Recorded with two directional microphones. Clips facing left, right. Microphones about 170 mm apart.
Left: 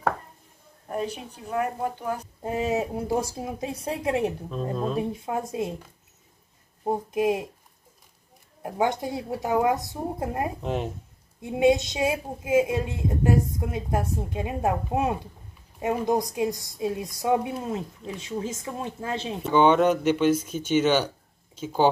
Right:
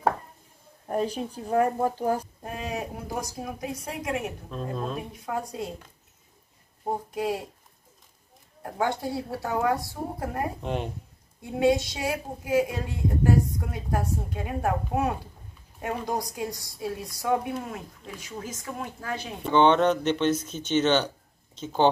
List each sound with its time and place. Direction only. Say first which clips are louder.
0.8 s speech: right 3 dB; 35° right (ahead or behind)
2.4 s speech: left 7 dB; 20° left (ahead or behind)
6.8 s speech: left 4 dB; 20° left (ahead or behind)
8.6 s speech: left 2 dB; 20° left (ahead or behind)
10.6 s speech: left 2 dB; centre (ahead or behind)
11.4 s speech: left 2 dB; 20° left (ahead or behind)
19.4 s speech: left 1 dB; 10° left (ahead or behind)